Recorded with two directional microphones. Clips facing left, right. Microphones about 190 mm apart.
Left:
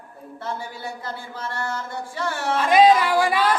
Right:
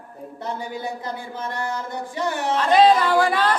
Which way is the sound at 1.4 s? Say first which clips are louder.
Right 1 dB; 15° right (ahead or behind).